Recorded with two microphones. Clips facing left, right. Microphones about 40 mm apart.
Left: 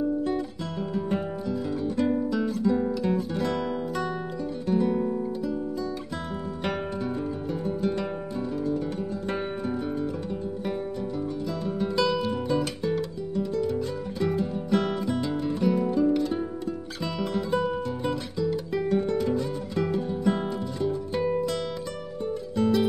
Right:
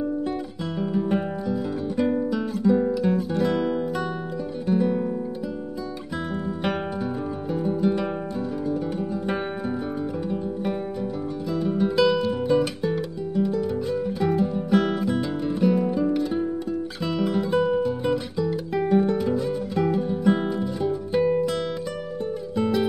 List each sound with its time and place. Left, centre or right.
0.0 s music: centre
4.6 s music: centre
7.6 s music: centre
11.6 s music: centre
22.6 s music: centre